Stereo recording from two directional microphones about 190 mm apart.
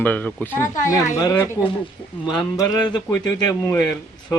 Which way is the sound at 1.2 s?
20° left (ahead or behind).